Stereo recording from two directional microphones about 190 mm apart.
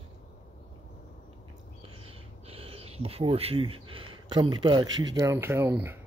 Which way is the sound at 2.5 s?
30° right (ahead or behind).